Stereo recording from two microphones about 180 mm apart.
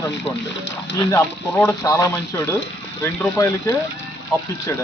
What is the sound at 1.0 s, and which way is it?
Speech, 15° left (ahead or behind).